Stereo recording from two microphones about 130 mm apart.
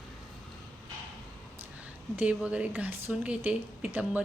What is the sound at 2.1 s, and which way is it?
A woman's voice, 10° right (ahead or behind).